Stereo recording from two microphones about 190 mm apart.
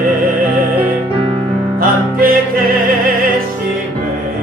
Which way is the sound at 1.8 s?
50° right (ahead or behind).